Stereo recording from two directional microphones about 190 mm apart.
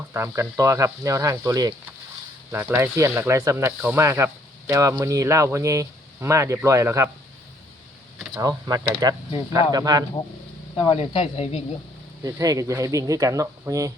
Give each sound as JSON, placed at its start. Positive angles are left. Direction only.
{"t": 0.1, "sound": "speech", "side_deg": -15}
{"t": 8.4, "sound": "speech", "side_deg": -20}
{"t": 10.8, "sound": "speech", "side_deg": 25}
{"t": 12.2, "sound": "speech", "side_deg": -20}